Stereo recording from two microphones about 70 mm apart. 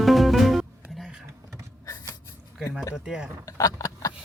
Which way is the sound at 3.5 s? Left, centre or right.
Left.